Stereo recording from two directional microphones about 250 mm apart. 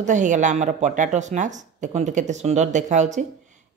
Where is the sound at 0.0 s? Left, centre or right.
Right.